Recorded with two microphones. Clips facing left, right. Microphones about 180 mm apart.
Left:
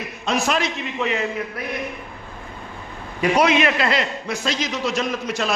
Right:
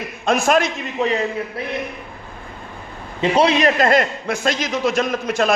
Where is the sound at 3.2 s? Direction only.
30° right (ahead or behind).